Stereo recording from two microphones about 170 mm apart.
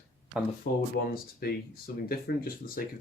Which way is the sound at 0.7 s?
65° left (ahead or behind).